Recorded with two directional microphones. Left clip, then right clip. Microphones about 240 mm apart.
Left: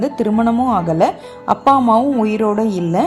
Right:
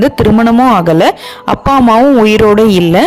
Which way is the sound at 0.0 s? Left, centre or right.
Right.